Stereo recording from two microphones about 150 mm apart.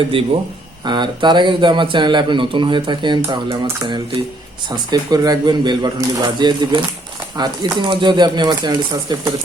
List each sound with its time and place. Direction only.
0.1 s a man's voice: 35° right (ahead or behind)